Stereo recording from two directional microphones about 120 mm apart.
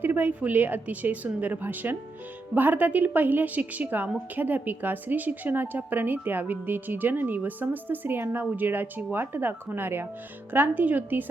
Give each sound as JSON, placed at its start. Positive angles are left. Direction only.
{"t": 0.0, "sound": "a woman's voice", "side_deg": -15}